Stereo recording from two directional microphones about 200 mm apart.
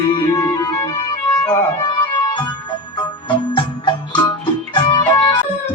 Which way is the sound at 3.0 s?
20° left (ahead or behind).